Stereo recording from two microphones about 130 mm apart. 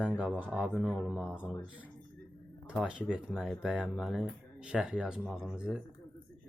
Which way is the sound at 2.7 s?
10° right (ahead or behind).